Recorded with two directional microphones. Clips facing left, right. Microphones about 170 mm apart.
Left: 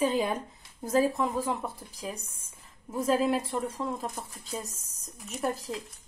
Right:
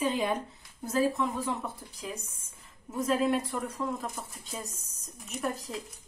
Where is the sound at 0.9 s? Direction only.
35° left (ahead or behind).